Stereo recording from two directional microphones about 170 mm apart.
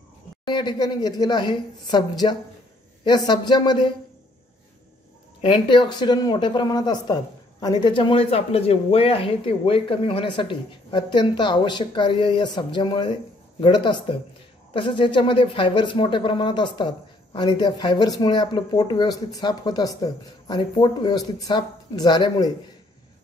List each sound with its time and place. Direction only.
0.5 s speech: 25° left (ahead or behind)
5.4 s speech: 25° left (ahead or behind)